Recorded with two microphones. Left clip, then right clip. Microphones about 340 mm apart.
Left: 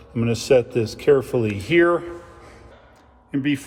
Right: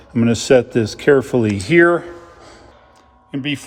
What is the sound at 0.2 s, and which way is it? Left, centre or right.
A man's voice, right.